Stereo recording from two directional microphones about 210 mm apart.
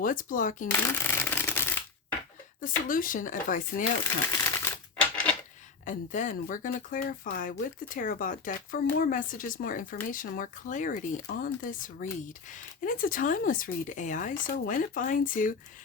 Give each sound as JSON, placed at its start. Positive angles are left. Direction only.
{"t": 0.0, "sound": "speech", "side_deg": 40}
{"t": 0.7, "sound": "shuffling cards", "side_deg": 10}
{"t": 2.6, "sound": "speech", "side_deg": 40}
{"t": 4.3, "sound": "crumpling", "side_deg": 15}
{"t": 5.8, "sound": "speech", "side_deg": 35}